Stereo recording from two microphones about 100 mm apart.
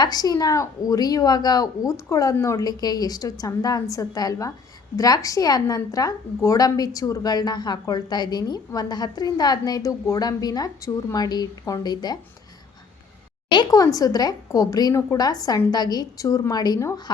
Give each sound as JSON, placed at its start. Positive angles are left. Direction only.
{"t": 0.0, "sound": "a woman's voice", "side_deg": 40}
{"t": 13.7, "sound": "a woman's voice", "side_deg": 35}